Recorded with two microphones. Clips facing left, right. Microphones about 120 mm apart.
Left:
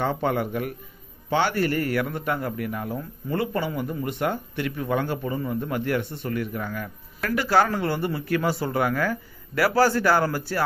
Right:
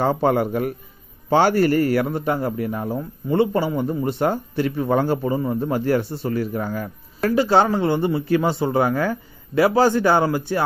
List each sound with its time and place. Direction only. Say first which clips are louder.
0.0 s a man's voice: right 6 dB; 35° right (ahead or behind); by 10.6 s 20° right (ahead or behind)